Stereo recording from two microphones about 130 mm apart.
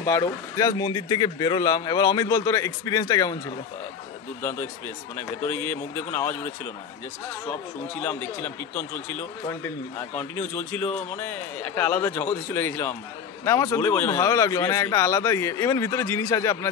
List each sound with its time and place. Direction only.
0.0 s speech: 25° left (ahead or behind)
7.4 s speech: 15° left (ahead or behind)